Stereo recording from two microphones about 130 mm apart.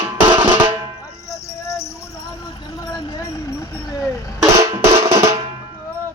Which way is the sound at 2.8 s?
30° left (ahead or behind).